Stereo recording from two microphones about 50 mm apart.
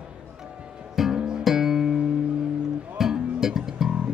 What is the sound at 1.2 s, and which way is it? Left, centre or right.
Music, centre.